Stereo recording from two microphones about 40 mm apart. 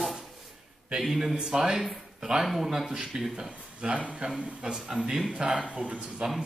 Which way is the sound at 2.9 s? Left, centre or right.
Right.